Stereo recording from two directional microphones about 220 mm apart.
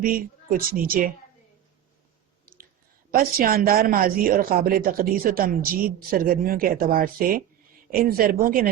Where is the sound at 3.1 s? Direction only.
40° right (ahead or behind).